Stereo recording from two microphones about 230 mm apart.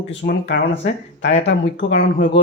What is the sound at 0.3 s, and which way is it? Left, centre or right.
Speech, left.